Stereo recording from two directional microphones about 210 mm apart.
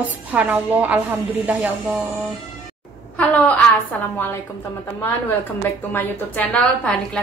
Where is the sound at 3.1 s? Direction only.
5° left (ahead or behind).